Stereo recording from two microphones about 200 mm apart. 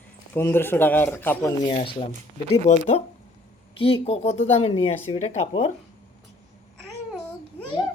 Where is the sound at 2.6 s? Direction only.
35° left (ahead or behind).